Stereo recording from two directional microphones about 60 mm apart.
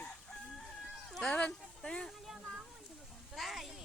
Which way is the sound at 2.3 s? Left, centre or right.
Centre.